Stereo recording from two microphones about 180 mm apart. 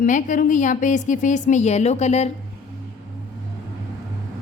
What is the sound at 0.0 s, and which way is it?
A woman's voice, 45° left (ahead or behind).